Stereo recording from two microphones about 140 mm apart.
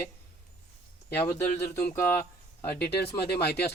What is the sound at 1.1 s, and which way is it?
Speech, 15° left (ahead or behind).